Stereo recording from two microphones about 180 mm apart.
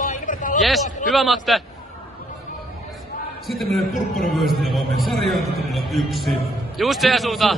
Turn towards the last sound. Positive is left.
turn(degrees=0)  # may be behind; listen again after turning